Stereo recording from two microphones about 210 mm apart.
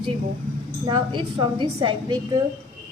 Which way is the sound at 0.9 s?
20° right (ahead or behind).